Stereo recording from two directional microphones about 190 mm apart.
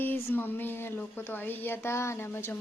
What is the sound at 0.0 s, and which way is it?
Speech, 10° left (ahead or behind).